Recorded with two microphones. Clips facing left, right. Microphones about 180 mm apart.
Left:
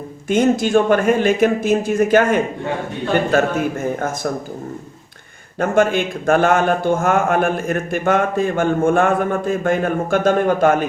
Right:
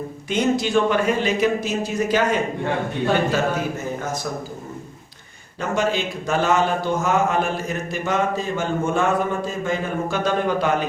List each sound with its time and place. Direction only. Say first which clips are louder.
0.3 s a man's voice: left 5 dB; 50° left (ahead or behind)
5.5 s a man's voice: left 6 dB; 55° left (ahead or behind)